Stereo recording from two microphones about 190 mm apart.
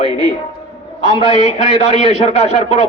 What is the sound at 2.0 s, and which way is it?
Speech, 35° left (ahead or behind).